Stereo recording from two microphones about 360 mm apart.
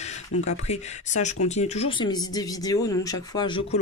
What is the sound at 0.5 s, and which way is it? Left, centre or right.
Speech, centre.